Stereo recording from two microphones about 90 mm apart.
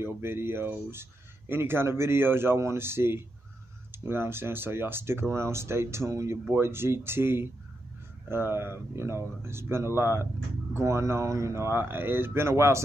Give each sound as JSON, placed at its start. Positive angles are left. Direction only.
{"t": 0.0, "sound": "speech", "side_deg": -25}